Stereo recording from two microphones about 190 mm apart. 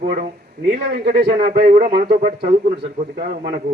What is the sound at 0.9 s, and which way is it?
Speech, 55° right (ahead or behind).